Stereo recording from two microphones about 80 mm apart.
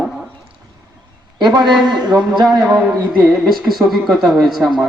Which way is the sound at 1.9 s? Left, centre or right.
Right.